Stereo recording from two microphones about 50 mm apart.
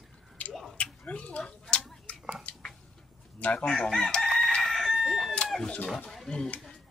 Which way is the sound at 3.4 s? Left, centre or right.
Left.